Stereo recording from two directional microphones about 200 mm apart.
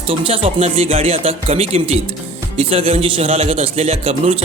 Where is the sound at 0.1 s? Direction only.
30° right (ahead or behind).